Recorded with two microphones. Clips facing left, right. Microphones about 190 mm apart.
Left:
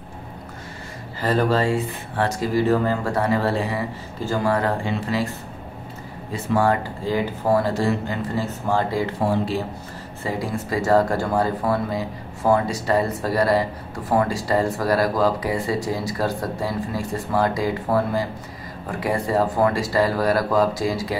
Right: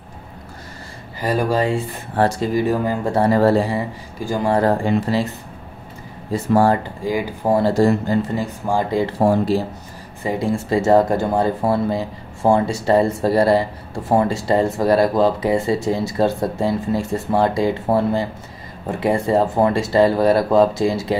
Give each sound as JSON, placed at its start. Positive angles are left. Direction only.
{"t": 1.2, "sound": "speech", "side_deg": -15}
{"t": 2.1, "sound": "speech", "side_deg": -30}
{"t": 2.5, "sound": "speech", "side_deg": -15}
{"t": 3.1, "sound": "speech", "side_deg": -35}
{"t": 6.3, "sound": "speech", "side_deg": -35}
{"t": 7.1, "sound": "speech", "side_deg": -15}
{"t": 7.7, "sound": "speech", "side_deg": -40}
{"t": 8.4, "sound": "speech", "side_deg": -15}
{"t": 9.2, "sound": "speech", "side_deg": -45}
{"t": 10.2, "sound": "speech", "side_deg": -25}